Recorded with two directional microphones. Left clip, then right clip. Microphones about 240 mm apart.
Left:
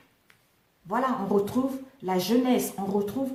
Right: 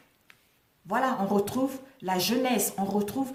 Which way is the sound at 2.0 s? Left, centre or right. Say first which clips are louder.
Left 1 dB; right.